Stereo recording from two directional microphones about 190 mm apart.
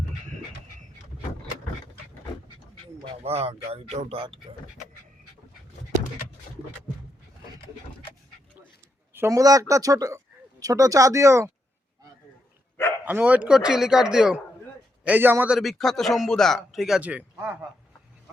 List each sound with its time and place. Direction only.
3.0 s speech: 30° right (ahead or behind)
9.1 s speech: 15° right (ahead or behind)
13.1 s a man's voice: 10° right (ahead or behind)